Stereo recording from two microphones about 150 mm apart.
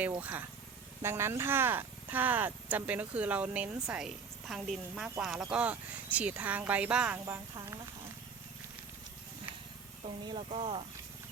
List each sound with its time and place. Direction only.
0.2 s speech: 10° right (ahead or behind)
7.5 s speech: 20° right (ahead or behind)
10.2 s speech: 35° right (ahead or behind)